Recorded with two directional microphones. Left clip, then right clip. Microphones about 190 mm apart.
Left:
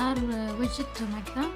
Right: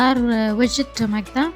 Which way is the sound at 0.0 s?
40° right (ahead or behind).